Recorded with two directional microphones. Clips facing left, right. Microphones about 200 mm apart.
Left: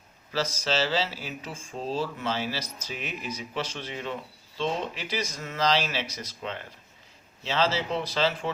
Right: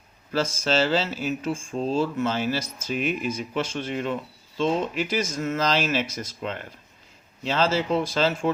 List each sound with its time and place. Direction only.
0.3 s speech: 50° right (ahead or behind)